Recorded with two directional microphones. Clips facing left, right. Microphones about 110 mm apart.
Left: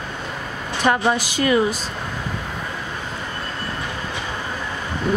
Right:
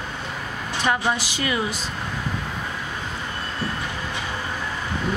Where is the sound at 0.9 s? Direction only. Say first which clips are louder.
Left 4 dB; 50° left (ahead or behind).